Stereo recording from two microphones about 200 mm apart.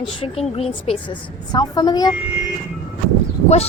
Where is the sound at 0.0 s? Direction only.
30° left (ahead or behind).